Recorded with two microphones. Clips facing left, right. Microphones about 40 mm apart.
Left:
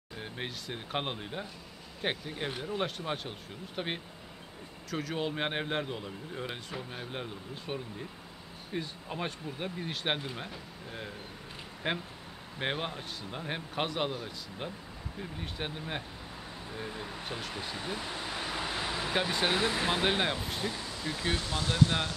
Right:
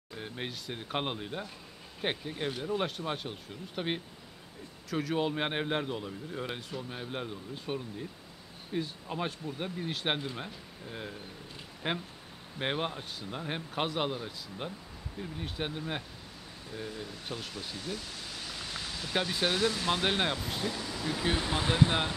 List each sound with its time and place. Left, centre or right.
0.2 s speech: centre
16.7 s speech: left
17.5 s vehicle: left
19.2 s speech: left
19.9 s speech: centre
21.4 s speech: right